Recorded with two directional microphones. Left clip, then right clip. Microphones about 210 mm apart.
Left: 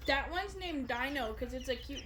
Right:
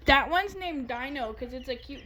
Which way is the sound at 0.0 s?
35° right (ahead or behind).